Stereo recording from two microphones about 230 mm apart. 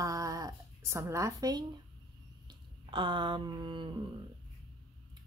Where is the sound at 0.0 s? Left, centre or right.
Centre.